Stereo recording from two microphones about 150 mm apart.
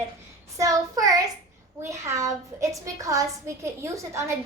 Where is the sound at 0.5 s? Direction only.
20° right (ahead or behind).